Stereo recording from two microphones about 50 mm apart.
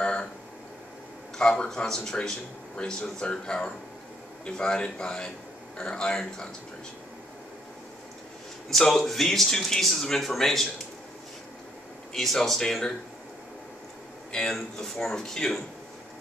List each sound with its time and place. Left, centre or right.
0.0 s a sound: centre
1.4 s a man's voice: centre
8.6 s speech: centre
12.1 s speech: centre
14.3 s speech: centre